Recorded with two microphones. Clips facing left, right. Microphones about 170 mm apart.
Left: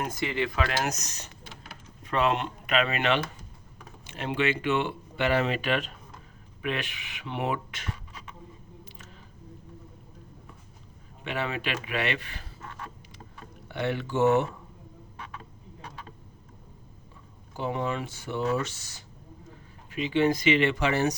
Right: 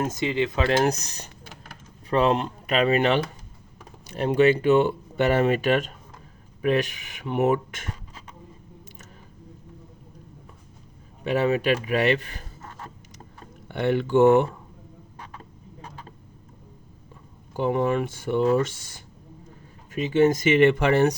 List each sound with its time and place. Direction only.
0.0 s speech: 20° right (ahead or behind); by 8.4 s 45° right (ahead or behind)
11.2 s speech: 40° right (ahead or behind)
13.7 s speech: 50° right (ahead or behind)
15.2 s a sound: 35° right (ahead or behind)
17.6 s speech: 50° right (ahead or behind)